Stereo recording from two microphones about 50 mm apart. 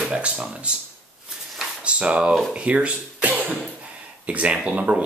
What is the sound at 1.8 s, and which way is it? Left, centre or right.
Speech, right.